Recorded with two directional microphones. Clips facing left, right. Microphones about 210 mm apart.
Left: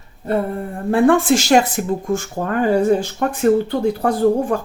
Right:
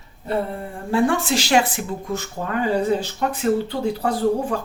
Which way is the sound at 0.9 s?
55° left (ahead or behind).